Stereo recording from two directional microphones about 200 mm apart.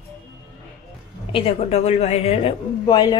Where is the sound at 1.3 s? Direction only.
30° left (ahead or behind).